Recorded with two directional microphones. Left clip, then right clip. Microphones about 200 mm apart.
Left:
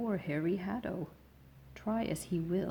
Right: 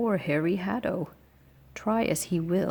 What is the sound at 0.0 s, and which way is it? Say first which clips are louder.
Speech: right 9 dB; 40° right (ahead or behind).